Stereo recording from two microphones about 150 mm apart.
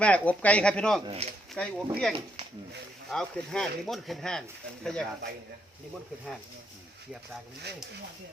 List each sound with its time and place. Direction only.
0.0 s speech: 10° left (ahead or behind)
1.0 s speech: 40° right (ahead or behind)
1.6 s speech: 10° left (ahead or behind)